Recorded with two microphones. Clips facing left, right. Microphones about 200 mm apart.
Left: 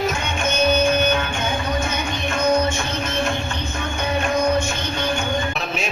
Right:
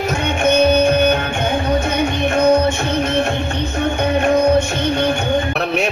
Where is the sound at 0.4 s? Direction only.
60° right (ahead or behind).